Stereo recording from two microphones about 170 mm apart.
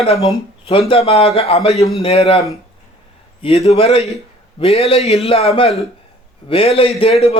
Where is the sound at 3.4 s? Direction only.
40° left (ahead or behind).